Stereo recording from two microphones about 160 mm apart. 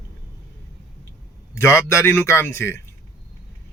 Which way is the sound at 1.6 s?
15° left (ahead or behind).